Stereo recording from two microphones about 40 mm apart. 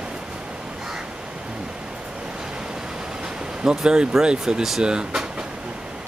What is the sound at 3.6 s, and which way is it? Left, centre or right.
Speech, right.